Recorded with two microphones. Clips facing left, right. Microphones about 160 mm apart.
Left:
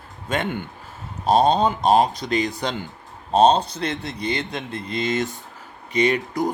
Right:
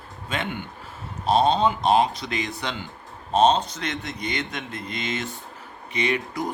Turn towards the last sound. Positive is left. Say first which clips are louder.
# left 5 dB
turn(degrees=40)  # may be behind; listen again after turning